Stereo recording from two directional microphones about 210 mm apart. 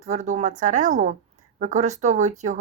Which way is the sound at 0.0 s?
35° right (ahead or behind).